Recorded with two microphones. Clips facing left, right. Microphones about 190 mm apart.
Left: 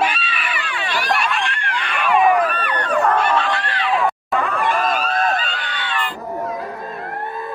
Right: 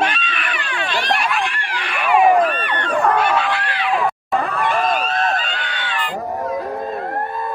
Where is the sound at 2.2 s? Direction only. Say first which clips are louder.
Right 2 dB; 30° right (ahead or behind).